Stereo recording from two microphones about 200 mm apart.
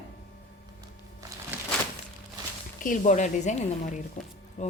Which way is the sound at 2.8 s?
40° left (ahead or behind).